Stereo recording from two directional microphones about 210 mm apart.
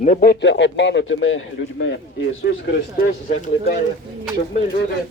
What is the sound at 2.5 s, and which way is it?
Speech, 60° left (ahead or behind).